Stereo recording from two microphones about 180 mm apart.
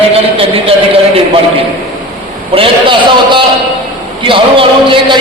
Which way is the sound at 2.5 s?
30° right (ahead or behind).